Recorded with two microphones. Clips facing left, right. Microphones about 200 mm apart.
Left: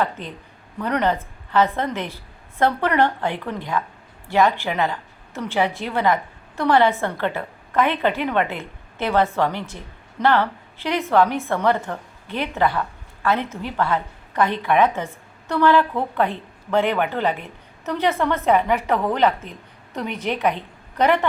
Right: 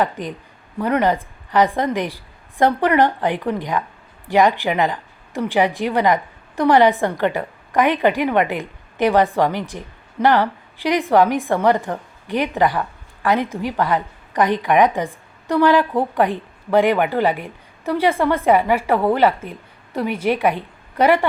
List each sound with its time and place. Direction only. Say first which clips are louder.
0.0 s a woman's voice: right 3 dB; 15° right (ahead or behind)